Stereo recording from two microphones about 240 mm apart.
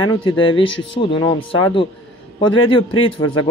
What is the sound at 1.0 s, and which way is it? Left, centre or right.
Speech, left.